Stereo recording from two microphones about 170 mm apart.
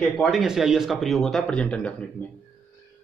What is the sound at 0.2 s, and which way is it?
A man's voice, centre (ahead or behind).